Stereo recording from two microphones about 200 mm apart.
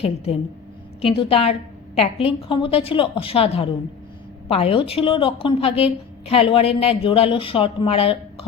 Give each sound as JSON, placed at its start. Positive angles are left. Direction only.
{"t": 1.0, "sound": "a woman's voice", "side_deg": 30}